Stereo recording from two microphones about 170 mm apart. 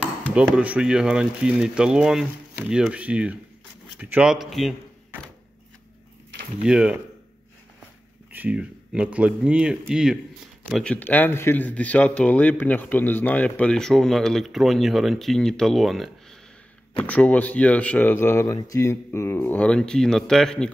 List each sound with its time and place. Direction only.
0.3 s speech: 5° right (ahead or behind)
6.6 s speech: 5° right (ahead or behind)
8.3 s speech: 10° right (ahead or behind)